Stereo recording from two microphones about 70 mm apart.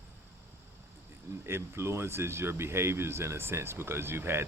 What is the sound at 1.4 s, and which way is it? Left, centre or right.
Speech, right.